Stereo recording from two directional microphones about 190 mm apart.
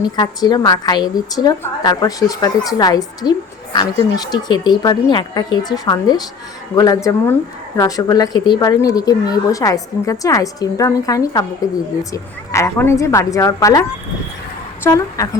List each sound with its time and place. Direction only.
0.0 s a woman's voice: 20° left (ahead or behind)
14.8 s speech: 15° left (ahead or behind)